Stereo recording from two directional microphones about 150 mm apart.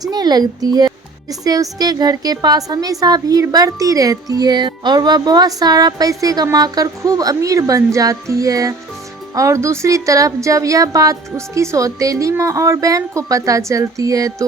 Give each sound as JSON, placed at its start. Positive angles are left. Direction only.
{"t": 0.1, "sound": "speech", "side_deg": -25}